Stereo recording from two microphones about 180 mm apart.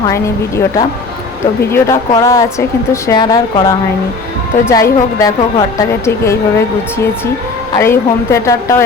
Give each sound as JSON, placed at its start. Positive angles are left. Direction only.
{"t": 0.1, "sound": "a woman's voice", "side_deg": 15}
{"t": 7.8, "sound": "a woman's voice", "side_deg": 15}